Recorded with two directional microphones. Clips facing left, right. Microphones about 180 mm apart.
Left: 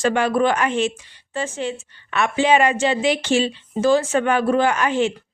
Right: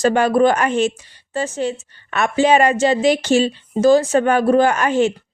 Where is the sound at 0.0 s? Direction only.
40° right (ahead or behind).